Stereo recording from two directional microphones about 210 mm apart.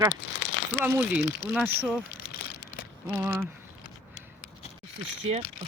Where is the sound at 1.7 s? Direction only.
10° right (ahead or behind).